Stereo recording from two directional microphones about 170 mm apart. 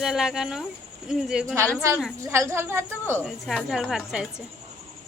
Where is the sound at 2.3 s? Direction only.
15° right (ahead or behind).